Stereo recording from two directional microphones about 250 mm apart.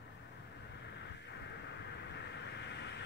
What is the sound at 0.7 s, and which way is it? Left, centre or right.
Vehicle, left.